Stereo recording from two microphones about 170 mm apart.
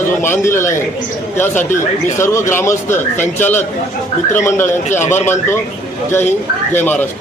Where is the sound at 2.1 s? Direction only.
15° left (ahead or behind).